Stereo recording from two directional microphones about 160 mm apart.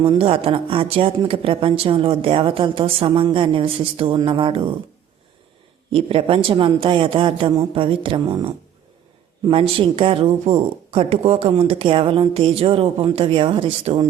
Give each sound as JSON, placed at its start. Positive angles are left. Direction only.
{"t": 0.0, "sound": "speech", "side_deg": -35}
{"t": 5.9, "sound": "speech", "side_deg": -35}